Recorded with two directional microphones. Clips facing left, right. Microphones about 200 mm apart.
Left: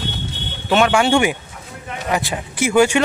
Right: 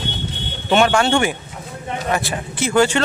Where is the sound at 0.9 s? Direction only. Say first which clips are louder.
Left 1 dB; 15° left (ahead or behind).